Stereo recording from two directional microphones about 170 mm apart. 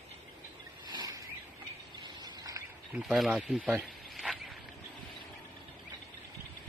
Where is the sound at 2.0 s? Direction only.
25° right (ahead or behind).